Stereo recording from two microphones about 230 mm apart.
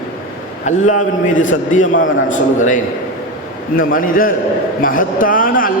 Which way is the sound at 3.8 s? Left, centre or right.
Left.